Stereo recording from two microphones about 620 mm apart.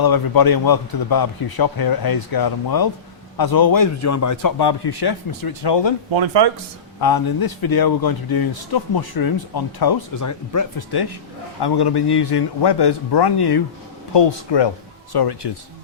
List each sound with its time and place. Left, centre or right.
0.0 s speech: left
6.1 s speech: right
7.0 s speech: left